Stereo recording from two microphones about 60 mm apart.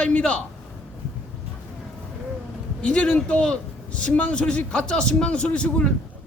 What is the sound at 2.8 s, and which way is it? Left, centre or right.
A man's voice, centre.